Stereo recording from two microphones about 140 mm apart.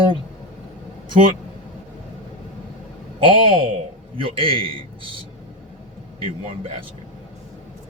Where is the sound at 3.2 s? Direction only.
35° right (ahead or behind).